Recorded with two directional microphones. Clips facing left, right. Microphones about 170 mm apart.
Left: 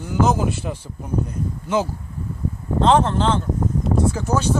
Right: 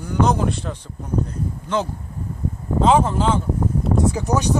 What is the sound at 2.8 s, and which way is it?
Speech, 5° right (ahead or behind).